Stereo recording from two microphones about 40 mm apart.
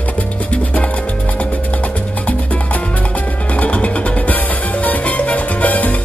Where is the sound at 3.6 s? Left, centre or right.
Left.